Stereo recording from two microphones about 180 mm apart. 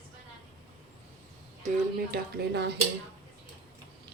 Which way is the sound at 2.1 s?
65° right (ahead or behind).